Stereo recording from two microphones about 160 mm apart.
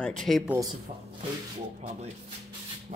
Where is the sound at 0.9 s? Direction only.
50° right (ahead or behind).